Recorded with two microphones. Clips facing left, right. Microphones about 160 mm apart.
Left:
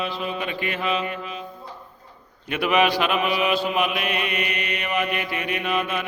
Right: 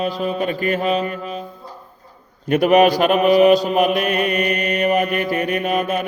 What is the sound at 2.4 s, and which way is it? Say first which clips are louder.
Mantra: right 8 dB; 45° right (ahead or behind).